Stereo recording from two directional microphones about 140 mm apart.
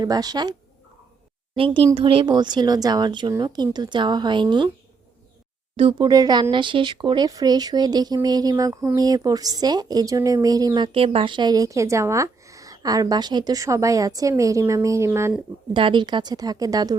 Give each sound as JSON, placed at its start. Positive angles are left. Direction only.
{"t": 0.0, "sound": "speech", "side_deg": -30}
{"t": 1.5, "sound": "a woman's voice", "side_deg": -40}
{"t": 5.7, "sound": "a woman's voice", "side_deg": -40}
{"t": 6.1, "sound": "speech", "side_deg": -30}
{"t": 15.7, "sound": "speech", "side_deg": -35}